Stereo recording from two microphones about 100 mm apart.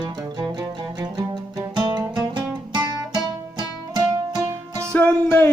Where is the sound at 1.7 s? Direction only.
45° right (ahead or behind).